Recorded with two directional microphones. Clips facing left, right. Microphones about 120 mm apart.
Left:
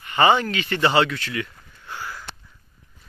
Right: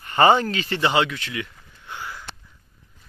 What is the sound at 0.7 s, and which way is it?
Speech, 15° right (ahead or behind).